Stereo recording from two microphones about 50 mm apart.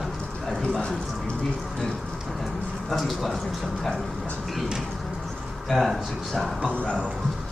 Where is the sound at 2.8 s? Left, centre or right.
Centre.